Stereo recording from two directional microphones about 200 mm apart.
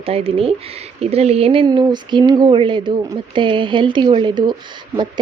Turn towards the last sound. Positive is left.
turn(degrees=-20)  # may be behind; listen again after turning